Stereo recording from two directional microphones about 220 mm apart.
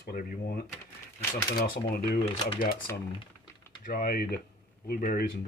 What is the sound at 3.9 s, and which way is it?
Speech, 40° left (ahead or behind).